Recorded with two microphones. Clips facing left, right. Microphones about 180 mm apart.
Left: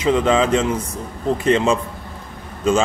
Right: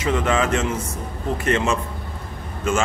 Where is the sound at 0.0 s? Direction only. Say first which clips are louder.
Left 4 dB; 20° left (ahead or behind).